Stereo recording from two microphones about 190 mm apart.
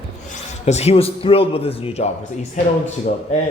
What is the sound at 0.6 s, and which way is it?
Speech, 35° left (ahead or behind).